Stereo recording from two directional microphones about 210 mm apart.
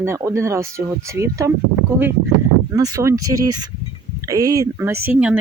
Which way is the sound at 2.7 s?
15° right (ahead or behind).